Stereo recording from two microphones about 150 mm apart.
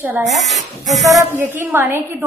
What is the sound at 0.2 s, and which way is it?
Speech, centre (ahead or behind).